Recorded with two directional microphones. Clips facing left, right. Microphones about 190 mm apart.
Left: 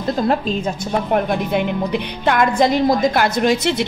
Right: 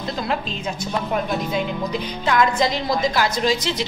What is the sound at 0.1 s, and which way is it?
A woman's voice, 45° left (ahead or behind).